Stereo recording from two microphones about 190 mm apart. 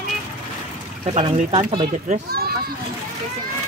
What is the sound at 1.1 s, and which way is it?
Speech, 30° right (ahead or behind).